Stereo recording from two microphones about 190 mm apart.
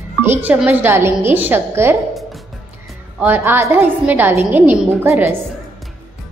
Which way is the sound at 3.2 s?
10° right (ahead or behind).